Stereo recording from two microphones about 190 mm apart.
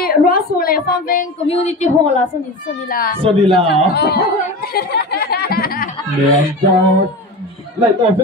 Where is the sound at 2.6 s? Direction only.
50° left (ahead or behind).